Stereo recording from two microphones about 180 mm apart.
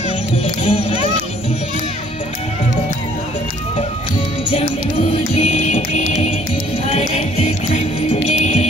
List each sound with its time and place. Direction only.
0.7 s speech: 30° left (ahead or behind)
5.1 s music: 35° left (ahead or behind)